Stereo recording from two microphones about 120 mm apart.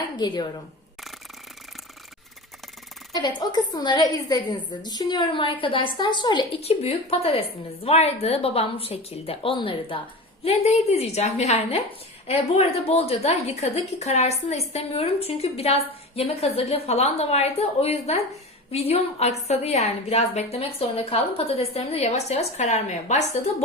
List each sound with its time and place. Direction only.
0.2 s a woman's voice: 35° left (ahead or behind)
3.1 s a woman's voice: 40° left (ahead or behind)
6.6 s a woman's voice: 60° left (ahead or behind)
10.4 s a woman's voice: 60° left (ahead or behind); by 23.4 s 75° left (ahead or behind)